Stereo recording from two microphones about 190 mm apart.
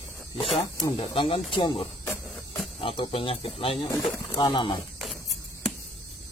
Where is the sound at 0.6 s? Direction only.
25° left (ahead or behind).